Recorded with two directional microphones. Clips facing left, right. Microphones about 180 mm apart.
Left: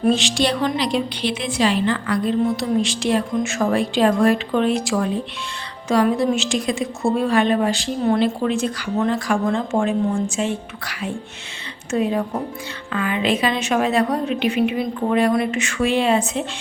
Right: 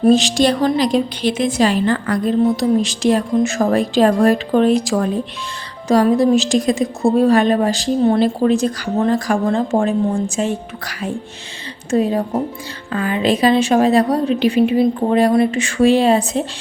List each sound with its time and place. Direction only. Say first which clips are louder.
0.0 s a woman's voice: right 6 dB; 40° right (ahead or behind)